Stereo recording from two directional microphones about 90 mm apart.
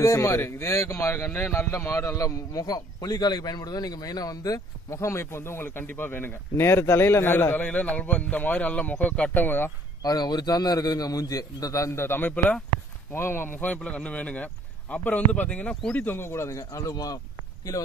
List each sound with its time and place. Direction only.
0.0 s speech: 35° left (ahead or behind)
10.0 s a man's voice: 50° left (ahead or behind)